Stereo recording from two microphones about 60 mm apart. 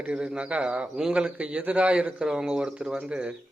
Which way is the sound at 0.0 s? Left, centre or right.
Centre.